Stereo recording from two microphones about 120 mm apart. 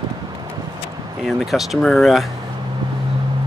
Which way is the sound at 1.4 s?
Centre (ahead or behind).